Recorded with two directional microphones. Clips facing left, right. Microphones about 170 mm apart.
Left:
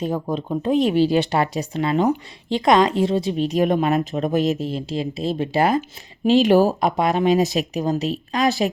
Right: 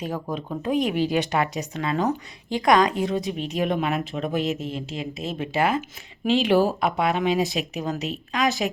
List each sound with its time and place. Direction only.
0.0 s a woman's voice: 25° left (ahead or behind)